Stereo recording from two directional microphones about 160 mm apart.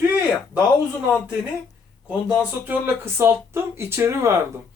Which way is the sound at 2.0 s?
10° right (ahead or behind).